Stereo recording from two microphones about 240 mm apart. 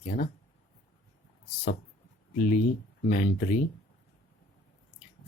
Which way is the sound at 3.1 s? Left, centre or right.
Left.